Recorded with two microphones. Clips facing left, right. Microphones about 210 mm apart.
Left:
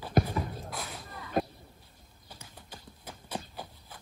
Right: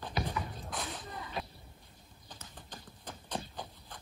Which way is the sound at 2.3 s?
10° left (ahead or behind).